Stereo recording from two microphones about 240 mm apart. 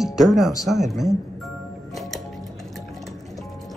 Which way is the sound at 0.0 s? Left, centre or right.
Centre.